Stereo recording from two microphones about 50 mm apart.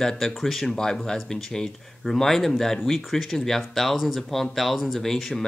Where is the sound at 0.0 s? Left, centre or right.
Centre.